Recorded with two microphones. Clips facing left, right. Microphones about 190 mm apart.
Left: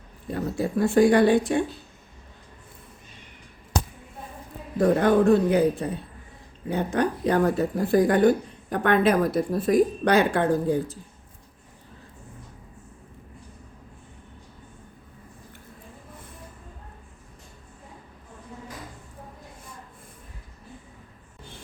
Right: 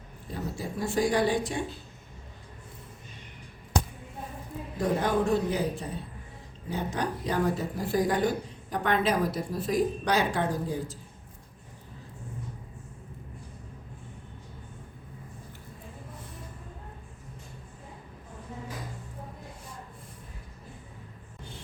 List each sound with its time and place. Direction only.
0.3 s speech: 60° left (ahead or behind)
4.8 s speech: 60° left (ahead or behind)